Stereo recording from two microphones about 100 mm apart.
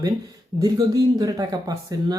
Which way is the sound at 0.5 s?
35° right (ahead or behind).